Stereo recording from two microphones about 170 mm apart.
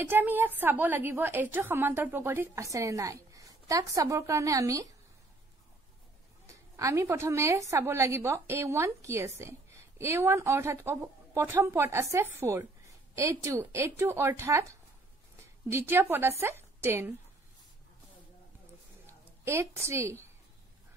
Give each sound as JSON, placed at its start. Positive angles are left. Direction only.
{"t": 0.0, "sound": "a woman's voice", "side_deg": -10}
{"t": 6.4, "sound": "a woman's voice", "side_deg": -15}
{"t": 19.4, "sound": "a woman's voice", "side_deg": -15}